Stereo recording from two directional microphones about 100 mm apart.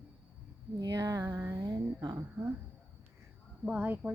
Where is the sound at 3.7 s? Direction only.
15° right (ahead or behind).